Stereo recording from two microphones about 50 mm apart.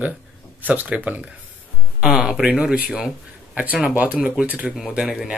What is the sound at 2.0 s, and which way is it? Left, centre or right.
Speech, centre.